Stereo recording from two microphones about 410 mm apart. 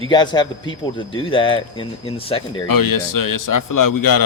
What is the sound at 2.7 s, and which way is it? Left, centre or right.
A man's voice, left.